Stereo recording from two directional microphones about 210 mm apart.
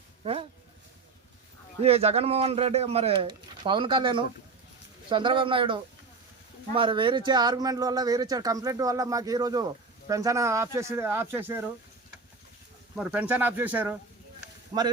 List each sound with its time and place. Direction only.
0.2 s speech: 30° right (ahead or behind)
1.8 s speech: 30° right (ahead or behind); by 11.7 s 10° right (ahead or behind)
13.0 s speech: 5° right (ahead or behind)